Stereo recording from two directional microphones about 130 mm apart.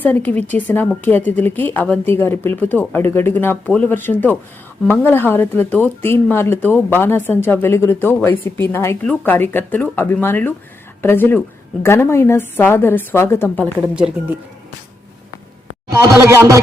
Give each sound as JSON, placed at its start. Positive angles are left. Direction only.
{"t": 0.0, "sound": "speech", "side_deg": 15}
{"t": 13.8, "sound": "speech", "side_deg": -5}
{"t": 15.9, "sound": "a man's voice", "side_deg": -20}